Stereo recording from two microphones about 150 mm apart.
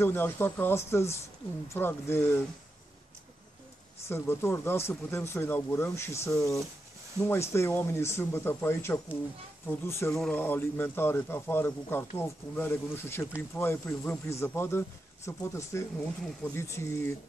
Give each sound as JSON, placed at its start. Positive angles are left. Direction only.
{"t": 0.0, "sound": "speech", "side_deg": 15}
{"t": 4.1, "sound": "speech", "side_deg": 15}
{"t": 10.1, "sound": "speech", "side_deg": 5}
{"t": 10.4, "sound": "speech", "side_deg": 15}